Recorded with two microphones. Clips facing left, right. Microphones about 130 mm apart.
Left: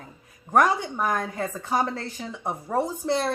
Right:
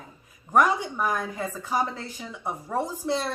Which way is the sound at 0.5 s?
50° left (ahead or behind).